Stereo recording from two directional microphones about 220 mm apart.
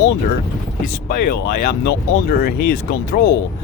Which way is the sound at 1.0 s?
40° left (ahead or behind).